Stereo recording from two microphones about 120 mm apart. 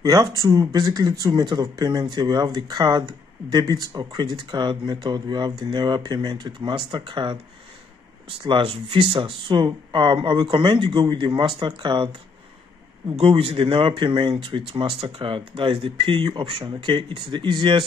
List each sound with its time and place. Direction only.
0.0 s speech: 30° right (ahead or behind)
8.5 s speech: 50° right (ahead or behind)
13.1 s speech: 50° right (ahead or behind)